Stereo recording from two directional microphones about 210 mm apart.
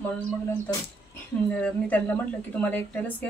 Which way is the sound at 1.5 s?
5° left (ahead or behind).